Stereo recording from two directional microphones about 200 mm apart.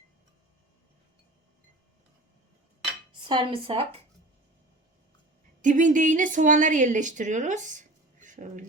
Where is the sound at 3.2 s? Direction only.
25° right (ahead or behind).